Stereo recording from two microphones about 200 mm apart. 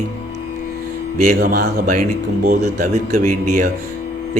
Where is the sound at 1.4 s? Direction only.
50° right (ahead or behind).